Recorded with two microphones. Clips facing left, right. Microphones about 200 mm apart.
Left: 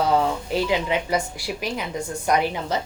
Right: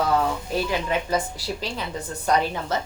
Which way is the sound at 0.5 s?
15° left (ahead or behind).